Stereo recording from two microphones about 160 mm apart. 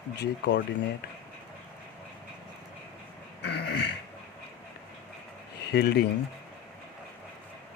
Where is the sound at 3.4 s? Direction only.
90° left.